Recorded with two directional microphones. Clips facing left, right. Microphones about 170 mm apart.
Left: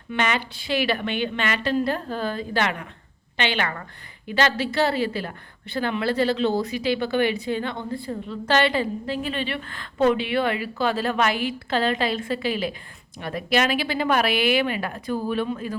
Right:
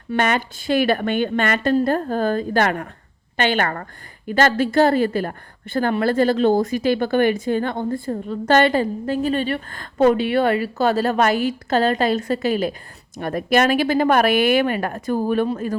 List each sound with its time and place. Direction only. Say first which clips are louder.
0.1 s a woman's voice: right 5 dB; 45° right (ahead or behind)